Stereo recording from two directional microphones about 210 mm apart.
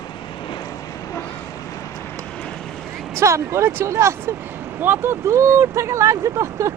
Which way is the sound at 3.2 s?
15° right (ahead or behind).